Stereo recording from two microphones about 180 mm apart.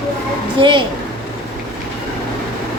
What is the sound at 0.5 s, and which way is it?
Speech, 30° right (ahead or behind).